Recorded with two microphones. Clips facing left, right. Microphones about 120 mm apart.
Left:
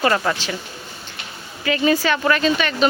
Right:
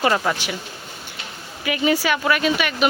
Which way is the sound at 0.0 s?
10° right (ahead or behind).